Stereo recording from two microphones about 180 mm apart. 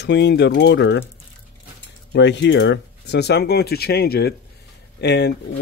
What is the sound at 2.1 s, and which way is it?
Speech, 75° left (ahead or behind).